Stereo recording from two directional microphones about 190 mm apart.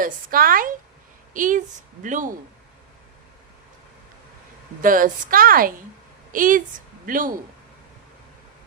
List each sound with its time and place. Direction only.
0.0 s a woman's voice: 50° right (ahead or behind)
4.8 s a woman's voice: 45° right (ahead or behind)